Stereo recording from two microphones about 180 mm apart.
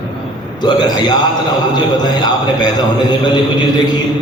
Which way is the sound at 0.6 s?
25° left (ahead or behind).